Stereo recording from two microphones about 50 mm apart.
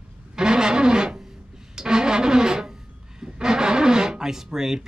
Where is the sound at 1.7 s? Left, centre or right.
Centre.